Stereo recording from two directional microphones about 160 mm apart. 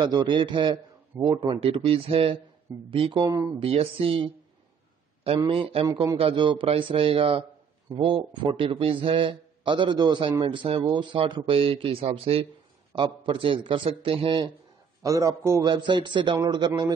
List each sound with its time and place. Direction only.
0.0 s a man's voice: 30° right (ahead or behind)
3.3 s a man's voice: 20° right (ahead or behind)
3.5 s a man's voice: 35° right (ahead or behind)
5.5 s a man's voice: 35° right (ahead or behind)
15.0 s a man's voice: 20° right (ahead or behind)